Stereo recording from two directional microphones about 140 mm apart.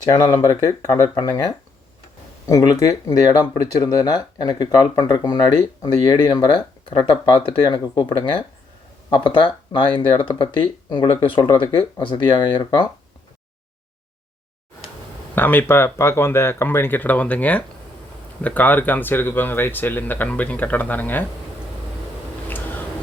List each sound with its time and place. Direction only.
0.3 s speech: 25° left (ahead or behind)
15.4 s speech: 15° left (ahead or behind)
22.4 s a sound: 15° left (ahead or behind)